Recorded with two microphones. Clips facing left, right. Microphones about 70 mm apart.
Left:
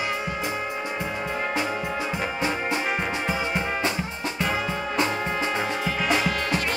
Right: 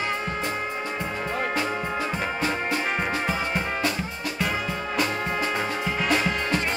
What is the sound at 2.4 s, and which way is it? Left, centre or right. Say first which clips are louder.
Music: left 1 dB; centre.